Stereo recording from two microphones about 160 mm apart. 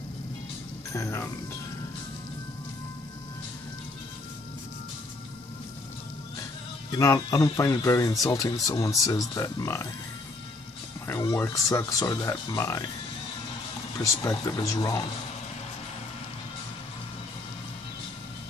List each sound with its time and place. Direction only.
0.9 s speech: 15° left (ahead or behind)
7.0 s speech: 20° left (ahead or behind)
11.1 s speech: 20° left (ahead or behind)
12.5 s speech: 15° left (ahead or behind)
13.9 s speech: 20° left (ahead or behind)